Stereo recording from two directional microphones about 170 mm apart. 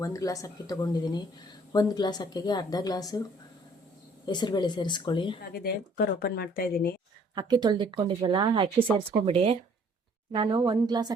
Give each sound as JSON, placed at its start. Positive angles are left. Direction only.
{"t": 0.0, "sound": "a woman's voice", "side_deg": 20}
{"t": 4.3, "sound": "a woman's voice", "side_deg": 25}
{"t": 5.5, "sound": "a woman's voice", "side_deg": 65}
{"t": 7.3, "sound": "speech", "side_deg": -25}